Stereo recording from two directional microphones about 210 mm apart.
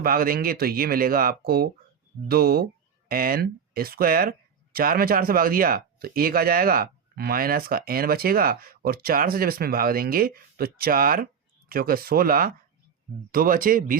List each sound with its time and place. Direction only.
0.0 s speech: 45° right (ahead or behind)